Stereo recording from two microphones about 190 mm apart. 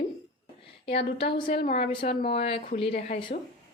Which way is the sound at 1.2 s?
25° left (ahead or behind).